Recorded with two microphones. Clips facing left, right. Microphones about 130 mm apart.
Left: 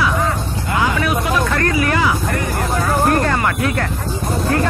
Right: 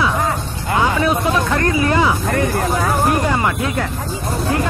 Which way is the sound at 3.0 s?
10° right (ahead or behind).